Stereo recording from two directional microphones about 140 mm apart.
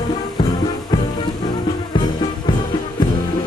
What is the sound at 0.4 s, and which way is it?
Music, 30° left (ahead or behind).